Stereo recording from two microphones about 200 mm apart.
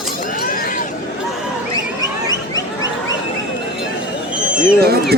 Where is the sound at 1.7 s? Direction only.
20° left (ahead or behind).